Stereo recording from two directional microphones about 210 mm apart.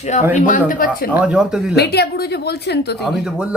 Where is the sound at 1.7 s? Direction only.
50° left (ahead or behind).